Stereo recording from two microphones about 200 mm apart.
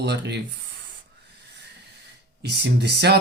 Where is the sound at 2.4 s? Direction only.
60° right (ahead or behind).